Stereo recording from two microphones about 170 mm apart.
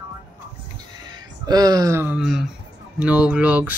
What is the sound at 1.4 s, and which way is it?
Speech, 20° right (ahead or behind).